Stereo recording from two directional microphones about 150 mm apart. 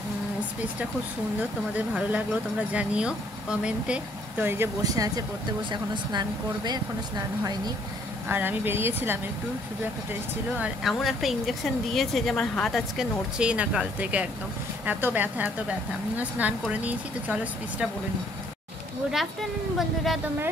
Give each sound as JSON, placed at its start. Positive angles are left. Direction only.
{"t": 2.0, "sound": "speech", "side_deg": -10}
{"t": 8.3, "sound": "speech", "side_deg": -15}
{"t": 10.6, "sound": "a woman's voice", "side_deg": 0}